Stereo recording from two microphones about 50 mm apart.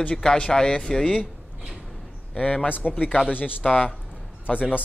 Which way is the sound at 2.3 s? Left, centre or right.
Centre.